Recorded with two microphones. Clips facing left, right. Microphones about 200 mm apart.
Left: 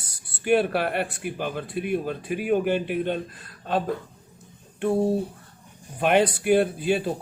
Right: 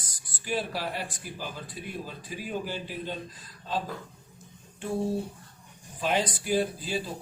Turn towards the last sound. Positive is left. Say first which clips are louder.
# left 7 dB
turn(degrees=60)  # may be behind; listen again after turning